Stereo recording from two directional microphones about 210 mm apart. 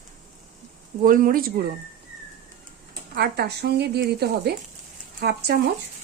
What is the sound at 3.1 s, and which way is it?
Speech, 50° right (ahead or behind).